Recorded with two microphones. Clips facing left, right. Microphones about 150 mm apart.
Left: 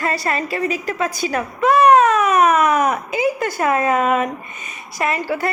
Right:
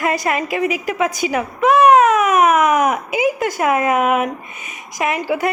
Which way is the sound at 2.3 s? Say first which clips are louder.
Right 1 dB; 20° right (ahead or behind).